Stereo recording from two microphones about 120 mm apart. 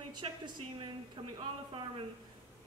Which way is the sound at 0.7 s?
40° right (ahead or behind).